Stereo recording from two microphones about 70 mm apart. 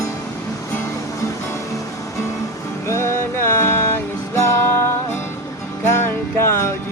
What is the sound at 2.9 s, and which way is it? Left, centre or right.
Music, left.